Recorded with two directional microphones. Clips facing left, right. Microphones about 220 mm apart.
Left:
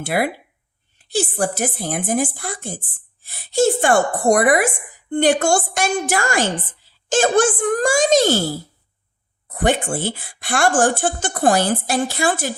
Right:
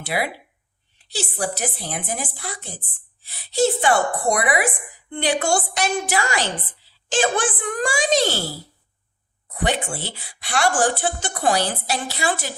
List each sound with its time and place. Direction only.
0.0 s a woman's voice: 50° left (ahead or behind)
9.5 s a woman's voice: 50° left (ahead or behind)